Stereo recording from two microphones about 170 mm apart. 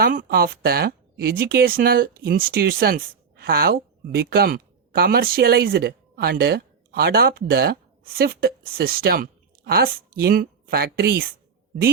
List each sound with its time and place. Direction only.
0.0 s speech: 55° right (ahead or behind)